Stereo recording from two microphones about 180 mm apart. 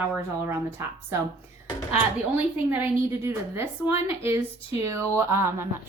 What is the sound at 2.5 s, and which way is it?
A woman's voice, 10° right (ahead or behind).